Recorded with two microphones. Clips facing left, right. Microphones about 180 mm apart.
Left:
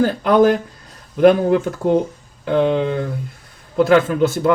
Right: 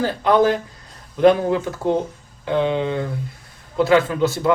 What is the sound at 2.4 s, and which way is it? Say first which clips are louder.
Speech: left 3 dB; 50° left (ahead or behind).